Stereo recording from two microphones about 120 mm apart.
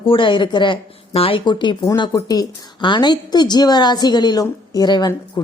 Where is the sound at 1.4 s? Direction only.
40° left (ahead or behind).